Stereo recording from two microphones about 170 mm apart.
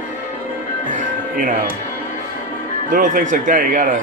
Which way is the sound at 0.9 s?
50° right (ahead or behind).